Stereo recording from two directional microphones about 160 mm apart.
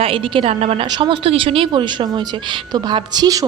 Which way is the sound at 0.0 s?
35° right (ahead or behind).